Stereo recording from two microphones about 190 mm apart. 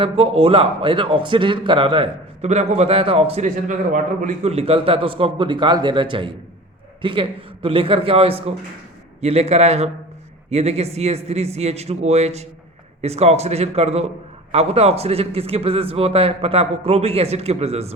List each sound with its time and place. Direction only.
0.0 s a man's voice: 30° right (ahead or behind)